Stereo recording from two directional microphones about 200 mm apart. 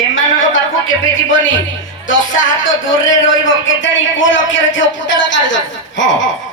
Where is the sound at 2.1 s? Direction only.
75° left (ahead or behind).